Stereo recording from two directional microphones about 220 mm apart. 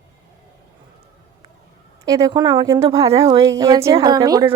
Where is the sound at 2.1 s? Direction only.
15° right (ahead or behind).